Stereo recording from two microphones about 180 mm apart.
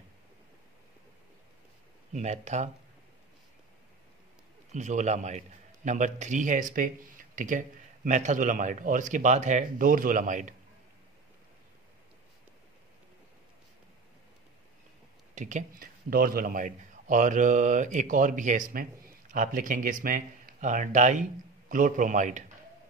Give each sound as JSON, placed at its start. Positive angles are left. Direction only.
{"t": 2.1, "sound": "a man's voice", "side_deg": -40}
{"t": 4.7, "sound": "a man's voice", "side_deg": -40}
{"t": 15.3, "sound": "a man's voice", "side_deg": -40}